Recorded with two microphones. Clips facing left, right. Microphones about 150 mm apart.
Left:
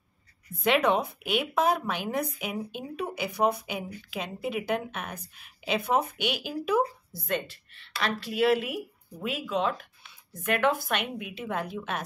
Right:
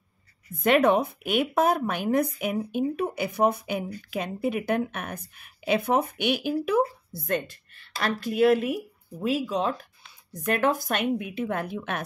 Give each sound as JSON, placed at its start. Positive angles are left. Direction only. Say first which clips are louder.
{"t": 0.6, "sound": "a woman's voice", "louder": "right 4 dB", "side_deg": -50}